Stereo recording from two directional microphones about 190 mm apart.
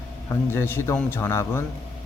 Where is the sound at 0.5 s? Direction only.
10° left (ahead or behind).